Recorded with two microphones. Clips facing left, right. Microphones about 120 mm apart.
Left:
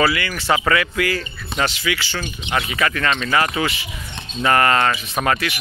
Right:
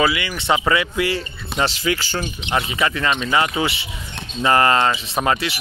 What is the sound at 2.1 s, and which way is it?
Speech, 25° right (ahead or behind).